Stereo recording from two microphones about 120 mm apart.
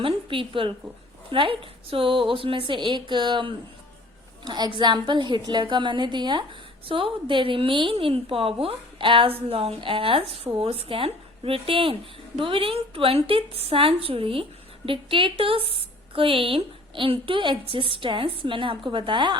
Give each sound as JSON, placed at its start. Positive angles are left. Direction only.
{"t": 0.0, "sound": "a woman's voice", "side_deg": -45}